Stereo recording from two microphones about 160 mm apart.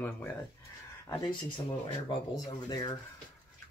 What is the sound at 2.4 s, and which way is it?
Speech, 25° left (ahead or behind).